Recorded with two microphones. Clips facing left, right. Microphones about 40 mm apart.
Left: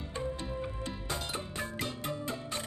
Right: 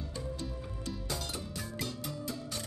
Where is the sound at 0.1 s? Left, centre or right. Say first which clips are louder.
Left 7 dB; left.